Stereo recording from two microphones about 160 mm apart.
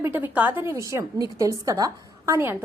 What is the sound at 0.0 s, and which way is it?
A woman's voice, 10° right (ahead or behind).